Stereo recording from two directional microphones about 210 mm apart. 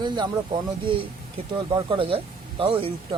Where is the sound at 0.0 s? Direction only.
20° right (ahead or behind).